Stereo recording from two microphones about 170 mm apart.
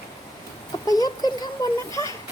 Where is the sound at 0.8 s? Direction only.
20° left (ahead or behind).